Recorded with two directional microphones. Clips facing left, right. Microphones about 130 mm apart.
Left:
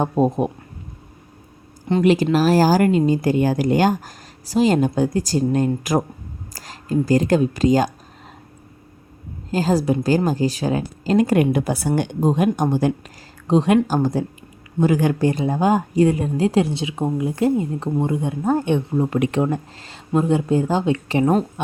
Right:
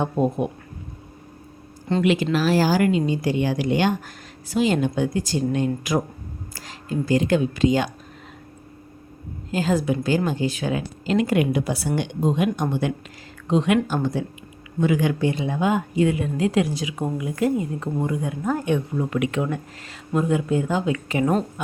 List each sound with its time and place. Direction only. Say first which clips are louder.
0.0 s speech: left 3 dB; 35° left (ahead or behind)
2.0 s speech: left 5 dB; 40° left (ahead or behind)
9.5 s speech: left 3 dB; 35° left (ahead or behind)